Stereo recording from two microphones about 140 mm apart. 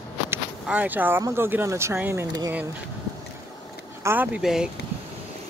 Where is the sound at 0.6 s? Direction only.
10° right (ahead or behind).